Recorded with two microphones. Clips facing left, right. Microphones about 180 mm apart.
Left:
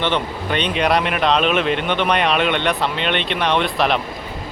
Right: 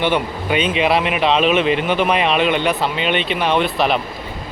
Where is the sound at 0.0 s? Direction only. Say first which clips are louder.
Right 2 dB; 10° right (ahead or behind).